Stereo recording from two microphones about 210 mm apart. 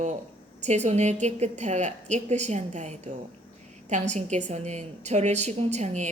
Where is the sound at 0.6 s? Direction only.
35° right (ahead or behind).